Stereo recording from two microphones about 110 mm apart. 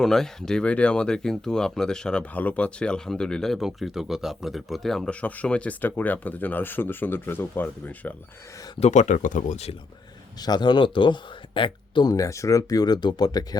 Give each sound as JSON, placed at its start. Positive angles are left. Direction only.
{"t": 0.0, "sound": "speech", "side_deg": 5}
{"t": 8.8, "sound": "speech", "side_deg": 90}
{"t": 10.4, "sound": "speech", "side_deg": 40}
{"t": 12.1, "sound": "speech", "side_deg": 30}